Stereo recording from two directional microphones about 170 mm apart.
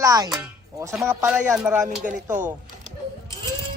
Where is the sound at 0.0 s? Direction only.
20° right (ahead or behind).